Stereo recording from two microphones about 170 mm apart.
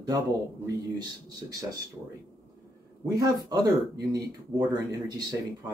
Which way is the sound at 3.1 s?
20° right (ahead or behind).